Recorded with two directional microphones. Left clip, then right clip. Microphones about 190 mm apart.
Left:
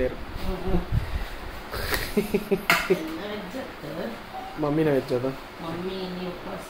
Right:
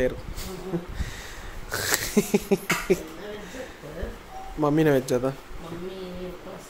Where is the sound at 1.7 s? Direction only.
60° right (ahead or behind).